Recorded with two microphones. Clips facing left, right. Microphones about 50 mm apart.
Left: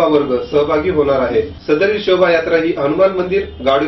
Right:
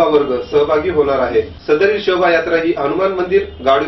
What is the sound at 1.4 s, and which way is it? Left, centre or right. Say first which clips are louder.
Speech: even; right.